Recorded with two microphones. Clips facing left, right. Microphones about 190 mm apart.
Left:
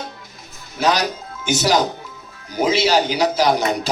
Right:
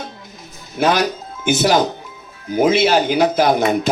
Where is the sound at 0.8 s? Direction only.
55° right (ahead or behind).